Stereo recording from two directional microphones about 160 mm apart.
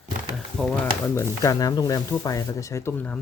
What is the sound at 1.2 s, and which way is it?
Speech, 20° left (ahead or behind).